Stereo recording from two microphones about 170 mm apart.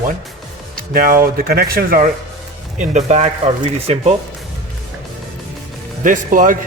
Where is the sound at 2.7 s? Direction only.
40° right (ahead or behind).